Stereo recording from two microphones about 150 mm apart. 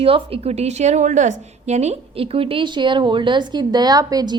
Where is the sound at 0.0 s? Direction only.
40° right (ahead or behind).